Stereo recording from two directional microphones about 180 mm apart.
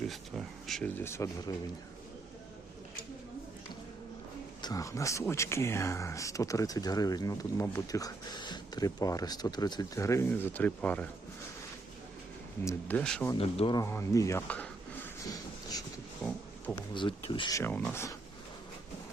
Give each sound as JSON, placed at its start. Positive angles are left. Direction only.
{"t": 0.1, "sound": "speech", "side_deg": 0}
{"t": 4.6, "sound": "speech", "side_deg": 20}
{"t": 12.6, "sound": "speech", "side_deg": 10}
{"t": 13.3, "sound": "speech", "side_deg": 30}
{"t": 13.7, "sound": "speech", "side_deg": 15}
{"t": 16.7, "sound": "speech", "side_deg": 25}
{"t": 17.5, "sound": "speech", "side_deg": 10}